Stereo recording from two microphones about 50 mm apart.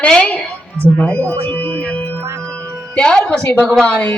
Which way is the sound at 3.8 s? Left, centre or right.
Left.